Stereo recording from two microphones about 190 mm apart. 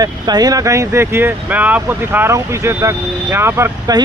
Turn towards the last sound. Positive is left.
turn(degrees=-15)  # may be behind; listen again after turning